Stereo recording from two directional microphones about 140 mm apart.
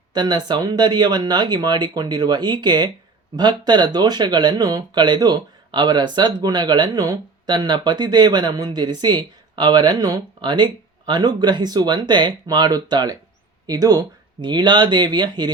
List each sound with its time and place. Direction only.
0.1 s speech: 30° right (ahead or behind)